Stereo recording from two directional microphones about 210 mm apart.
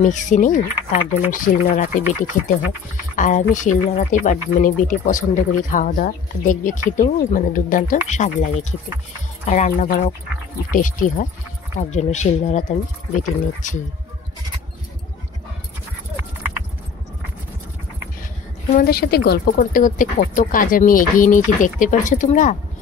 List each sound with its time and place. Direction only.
0.0 s speech: 35° left (ahead or behind)
3.2 s speech: 40° left (ahead or behind)
18.7 s speech: 45° left (ahead or behind)